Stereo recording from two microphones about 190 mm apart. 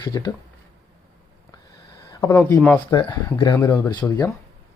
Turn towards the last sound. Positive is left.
turn(degrees=20)  # may be behind; listen again after turning